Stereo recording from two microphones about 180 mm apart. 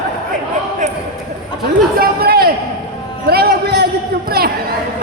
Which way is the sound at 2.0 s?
60° right (ahead or behind).